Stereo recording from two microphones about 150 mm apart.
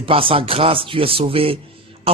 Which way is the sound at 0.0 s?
35° right (ahead or behind).